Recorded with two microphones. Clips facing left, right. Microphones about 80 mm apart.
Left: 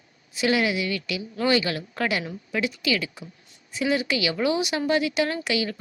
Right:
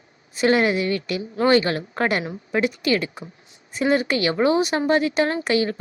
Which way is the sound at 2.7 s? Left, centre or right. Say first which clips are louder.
Right 4 dB; right.